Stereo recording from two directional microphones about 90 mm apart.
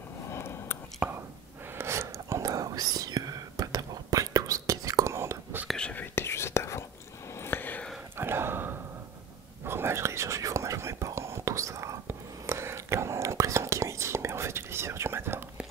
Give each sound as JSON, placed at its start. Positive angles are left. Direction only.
{"t": 0.3, "sound": "a sound", "side_deg": 30}
{"t": 1.0, "sound": "speech", "side_deg": -10}
{"t": 1.7, "sound": "whispering", "side_deg": -30}
{"t": 5.7, "sound": "whispering", "side_deg": 10}
{"t": 6.1, "sound": "whispering", "side_deg": 30}
{"t": 7.3, "sound": "a sound", "side_deg": 25}
{"t": 8.2, "sound": "gasp", "side_deg": -25}
{"t": 9.7, "sound": "whispering", "side_deg": -30}